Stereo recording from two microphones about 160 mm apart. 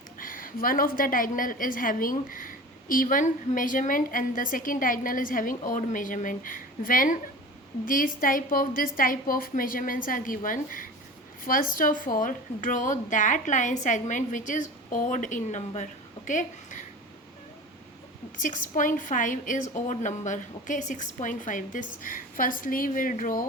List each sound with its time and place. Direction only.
0.2 s a woman's voice: 60° left (ahead or behind)
18.3 s a woman's voice: 55° left (ahead or behind)